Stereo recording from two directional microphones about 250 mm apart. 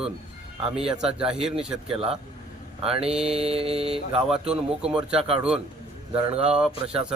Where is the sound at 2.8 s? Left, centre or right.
Right.